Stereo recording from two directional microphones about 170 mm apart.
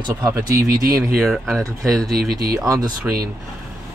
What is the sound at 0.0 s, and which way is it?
Speech, 20° right (ahead or behind).